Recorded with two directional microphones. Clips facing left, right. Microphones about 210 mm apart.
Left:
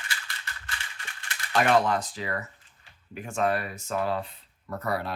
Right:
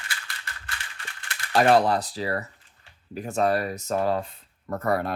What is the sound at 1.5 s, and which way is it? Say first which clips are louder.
Speech: right 4 dB; 35° right (ahead or behind).